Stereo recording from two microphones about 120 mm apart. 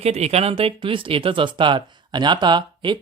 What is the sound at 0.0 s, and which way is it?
Speech, 60° right (ahead or behind).